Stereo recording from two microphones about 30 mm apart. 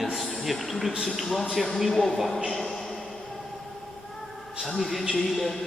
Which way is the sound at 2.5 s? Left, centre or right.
Centre.